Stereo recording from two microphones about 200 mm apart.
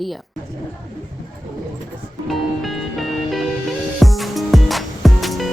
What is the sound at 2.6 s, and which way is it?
Music, centre (ahead or behind).